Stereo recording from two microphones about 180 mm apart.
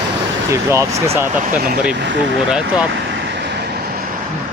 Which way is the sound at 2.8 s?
80° right.